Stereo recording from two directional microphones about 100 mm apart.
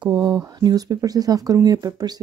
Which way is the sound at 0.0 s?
45° right (ahead or behind).